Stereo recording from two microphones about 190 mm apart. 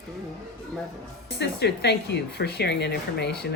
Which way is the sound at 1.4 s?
60° left (ahead or behind).